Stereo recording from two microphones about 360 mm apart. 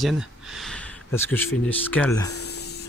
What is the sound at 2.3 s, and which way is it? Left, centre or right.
Spray, left.